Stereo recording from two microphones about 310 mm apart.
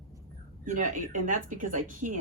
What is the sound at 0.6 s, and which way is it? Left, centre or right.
Speech, right.